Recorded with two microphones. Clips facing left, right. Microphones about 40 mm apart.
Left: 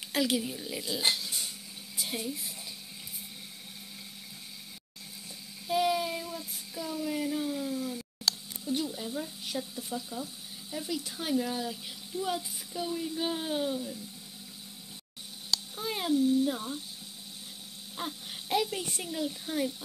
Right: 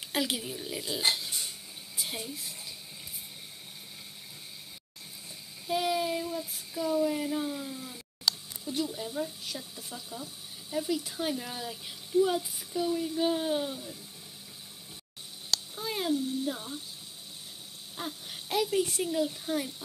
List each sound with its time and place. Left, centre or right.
0.1 s speech: centre
0.4 s a woman's voice: centre
5.7 s child singing: centre
8.9 s speech: centre
9.4 s speech: centre
9.9 s speech: centre
15.7 s a sound: centre
17.9 s a sound: centre
18.7 s speech: centre